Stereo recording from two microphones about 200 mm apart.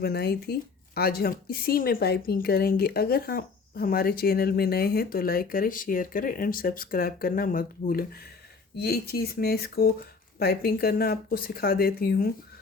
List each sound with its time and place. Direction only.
0.0 s speech: 55° left (ahead or behind)